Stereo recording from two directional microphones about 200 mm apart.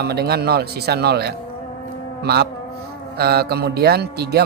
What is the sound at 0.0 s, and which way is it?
Speech, 55° right (ahead or behind).